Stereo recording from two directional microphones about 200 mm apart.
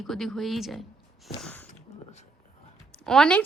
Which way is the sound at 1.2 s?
5° left (ahead or behind).